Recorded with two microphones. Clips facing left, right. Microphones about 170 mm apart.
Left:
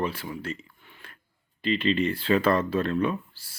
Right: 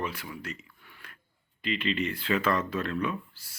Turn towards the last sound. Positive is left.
turn(degrees=30)  # may be behind; listen again after turning